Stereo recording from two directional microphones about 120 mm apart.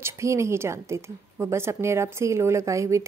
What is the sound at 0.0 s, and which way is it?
A woman's voice, 25° right (ahead or behind).